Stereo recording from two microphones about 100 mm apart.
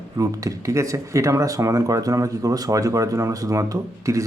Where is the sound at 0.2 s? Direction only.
35° right (ahead or behind).